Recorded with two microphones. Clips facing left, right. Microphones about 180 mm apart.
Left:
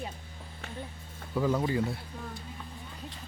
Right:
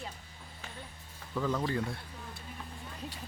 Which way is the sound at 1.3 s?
10° left (ahead or behind).